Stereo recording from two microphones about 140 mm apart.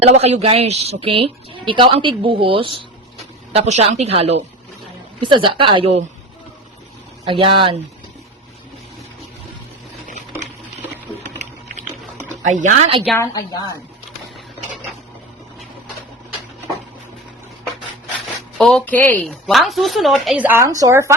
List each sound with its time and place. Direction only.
0.0 s a woman's voice: 50° right (ahead or behind)
3.5 s a woman's voice: 50° right (ahead or behind)
5.2 s a woman's voice: 35° right (ahead or behind)
7.3 s a woman's voice: 35° right (ahead or behind)
11.3 s typing: 55° right (ahead or behind)
12.5 s a woman's voice: 65° right (ahead or behind)
13.1 s a woman's voice: 25° left (ahead or behind)
18.5 s speech: centre (ahead or behind)
20.4 s a woman's voice: 20° right (ahead or behind)